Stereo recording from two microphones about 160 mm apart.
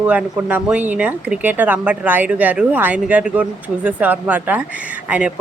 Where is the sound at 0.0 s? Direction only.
10° right (ahead or behind).